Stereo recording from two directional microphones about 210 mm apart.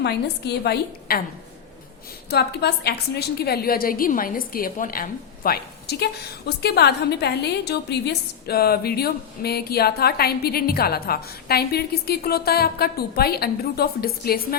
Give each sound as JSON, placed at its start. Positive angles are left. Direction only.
{"t": 0.0, "sound": "a woman's voice", "side_deg": 50}
{"t": 2.3, "sound": "a woman's voice", "side_deg": 50}